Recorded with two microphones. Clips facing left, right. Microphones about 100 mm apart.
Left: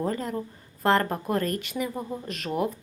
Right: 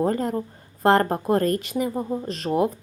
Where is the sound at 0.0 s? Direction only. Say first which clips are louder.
Right 6 dB; 40° right (ahead or behind).